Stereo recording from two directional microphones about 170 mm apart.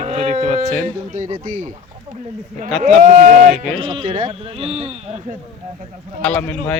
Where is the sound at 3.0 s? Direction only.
45° right (ahead or behind).